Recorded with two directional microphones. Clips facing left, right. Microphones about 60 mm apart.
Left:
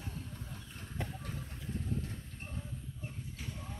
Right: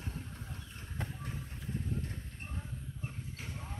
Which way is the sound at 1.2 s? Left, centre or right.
Centre.